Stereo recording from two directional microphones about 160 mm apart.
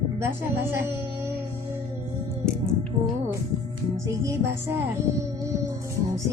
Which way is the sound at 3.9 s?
20° right (ahead or behind).